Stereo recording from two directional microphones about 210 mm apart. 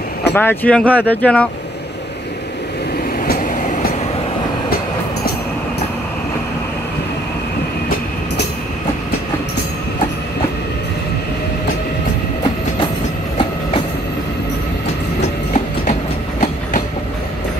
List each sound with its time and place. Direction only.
0.3 s speech: 10° left (ahead or behind)
3.3 s train: 40° left (ahead or behind)
15.5 s train: 35° left (ahead or behind)